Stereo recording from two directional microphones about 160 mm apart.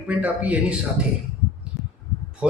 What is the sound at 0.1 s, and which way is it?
Speech, 10° right (ahead or behind).